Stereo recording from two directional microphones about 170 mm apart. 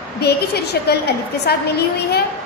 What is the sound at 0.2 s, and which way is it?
A woman's voice, 70° left (ahead or behind).